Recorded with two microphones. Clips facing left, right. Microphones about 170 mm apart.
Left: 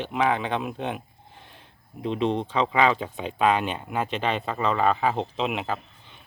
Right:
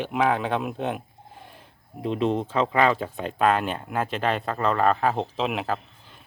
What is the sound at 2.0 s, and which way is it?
Speech, 5° right (ahead or behind).